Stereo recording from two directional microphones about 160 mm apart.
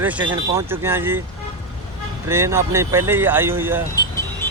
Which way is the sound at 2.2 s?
15° right (ahead or behind).